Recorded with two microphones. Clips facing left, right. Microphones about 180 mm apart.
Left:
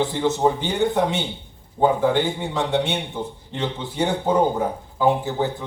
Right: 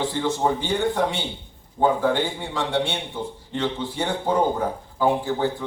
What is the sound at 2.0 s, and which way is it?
Speech, 20° left (ahead or behind).